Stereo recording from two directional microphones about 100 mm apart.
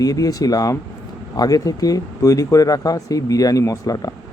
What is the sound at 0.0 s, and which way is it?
Speech, 35° left (ahead or behind).